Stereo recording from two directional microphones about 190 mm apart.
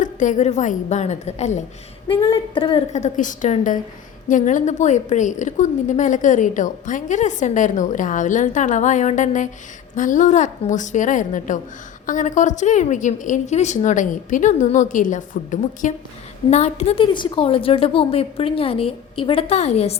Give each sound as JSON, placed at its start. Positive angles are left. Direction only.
{"t": 0.0, "sound": "a woman's voice", "side_deg": 40}